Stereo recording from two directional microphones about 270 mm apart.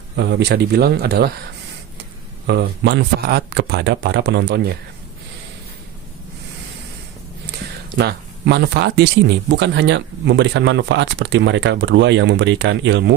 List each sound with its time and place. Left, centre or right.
0.2 s speech: right
2.5 s speech: right
7.9 s speech: right